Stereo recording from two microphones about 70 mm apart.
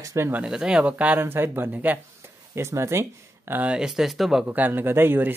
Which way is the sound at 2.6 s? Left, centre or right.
Right.